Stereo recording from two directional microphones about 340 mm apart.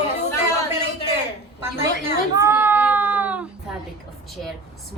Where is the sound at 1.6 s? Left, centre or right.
Centre.